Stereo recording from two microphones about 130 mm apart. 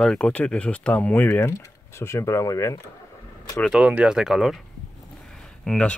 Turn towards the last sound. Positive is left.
turn(degrees=5)  # may be behind; listen again after turning